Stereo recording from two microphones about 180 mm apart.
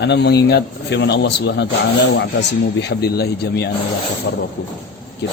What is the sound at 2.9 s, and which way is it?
Speech, 65° left (ahead or behind).